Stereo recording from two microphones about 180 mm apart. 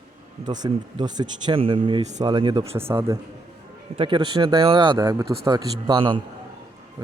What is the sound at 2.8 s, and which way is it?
Speech, 15° right (ahead or behind).